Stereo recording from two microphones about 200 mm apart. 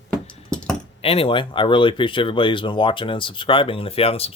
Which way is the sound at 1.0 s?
25° left (ahead or behind).